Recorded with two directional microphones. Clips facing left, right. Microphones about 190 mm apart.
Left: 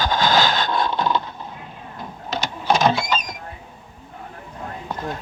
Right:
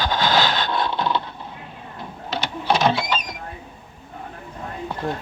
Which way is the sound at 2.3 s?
45° left (ahead or behind).